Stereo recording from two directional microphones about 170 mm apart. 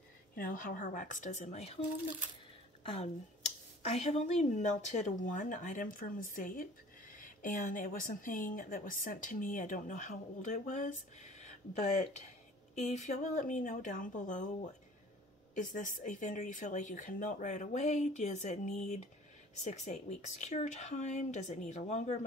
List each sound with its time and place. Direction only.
0.4 s speech: 55° left (ahead or behind)
2.8 s speech: 35° left (ahead or behind)
15.5 s speech: 50° left (ahead or behind)